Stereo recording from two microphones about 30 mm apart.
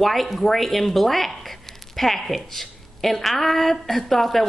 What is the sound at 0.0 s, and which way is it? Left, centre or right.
A woman's voice, centre.